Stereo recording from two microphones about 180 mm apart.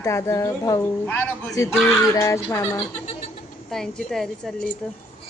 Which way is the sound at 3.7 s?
5° left (ahead or behind).